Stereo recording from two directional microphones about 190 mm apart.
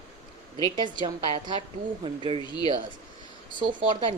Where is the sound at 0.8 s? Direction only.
25° right (ahead or behind).